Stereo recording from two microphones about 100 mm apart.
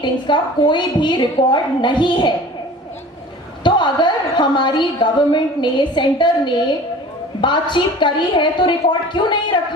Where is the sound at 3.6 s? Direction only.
50° left (ahead or behind).